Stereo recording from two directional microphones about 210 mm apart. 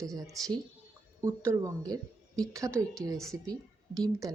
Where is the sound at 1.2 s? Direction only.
15° right (ahead or behind).